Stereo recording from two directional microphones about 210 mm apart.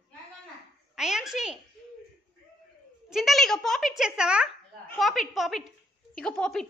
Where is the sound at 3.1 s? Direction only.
Centre (ahead or behind).